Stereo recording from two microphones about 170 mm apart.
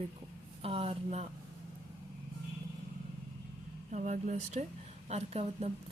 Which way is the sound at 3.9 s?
45° right (ahead or behind).